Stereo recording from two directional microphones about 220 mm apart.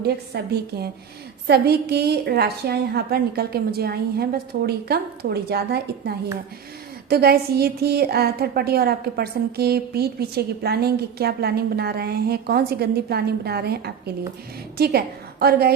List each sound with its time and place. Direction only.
0.0 s a woman's voice: 45° right (ahead or behind)